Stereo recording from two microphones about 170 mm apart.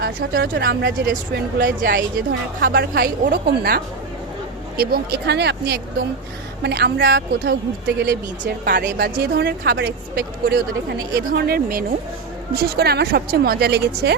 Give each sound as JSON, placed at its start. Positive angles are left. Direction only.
{"t": 0.0, "sound": "a woman's voice", "side_deg": -65}